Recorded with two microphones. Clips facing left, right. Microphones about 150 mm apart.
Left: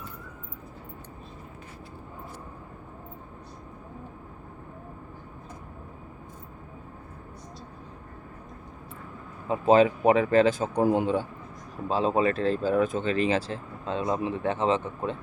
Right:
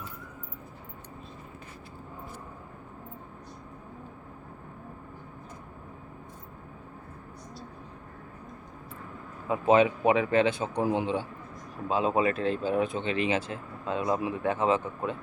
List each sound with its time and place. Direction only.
9.5 s a man's voice: 35° left (ahead or behind)
11.9 s speech: 35° left (ahead or behind)